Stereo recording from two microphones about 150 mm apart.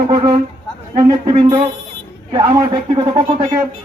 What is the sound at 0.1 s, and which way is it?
A man's voice, 30° right (ahead or behind).